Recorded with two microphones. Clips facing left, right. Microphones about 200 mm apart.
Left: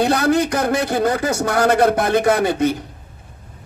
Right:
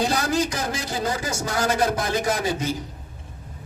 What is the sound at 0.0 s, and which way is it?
A man's voice, 60° left (ahead or behind).